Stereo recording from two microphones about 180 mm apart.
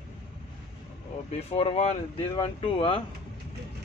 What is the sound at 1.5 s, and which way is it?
Speech, 30° left (ahead or behind).